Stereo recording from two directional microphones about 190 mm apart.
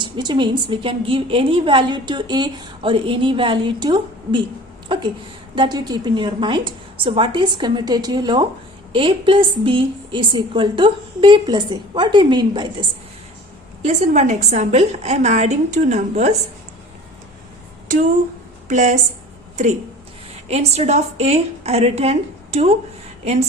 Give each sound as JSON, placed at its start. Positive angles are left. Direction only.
{"t": 0.0, "sound": "a woman's voice", "side_deg": -25}
{"t": 5.5, "sound": "a woman's voice", "side_deg": -20}
{"t": 13.8, "sound": "a woman's voice", "side_deg": -35}
{"t": 18.7, "sound": "a woman's voice", "side_deg": -40}
{"t": 20.5, "sound": "a woman's voice", "side_deg": -35}